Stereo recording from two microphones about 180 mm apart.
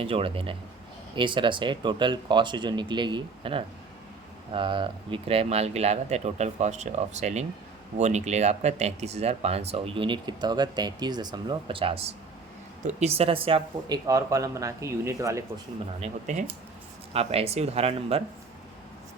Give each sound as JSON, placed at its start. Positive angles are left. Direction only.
{"t": 0.0, "sound": "speech", "side_deg": -30}
{"t": 16.0, "sound": "speech", "side_deg": -40}